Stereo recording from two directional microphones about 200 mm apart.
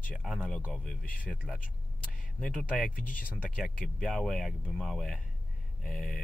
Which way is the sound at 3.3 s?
Centre (ahead or behind).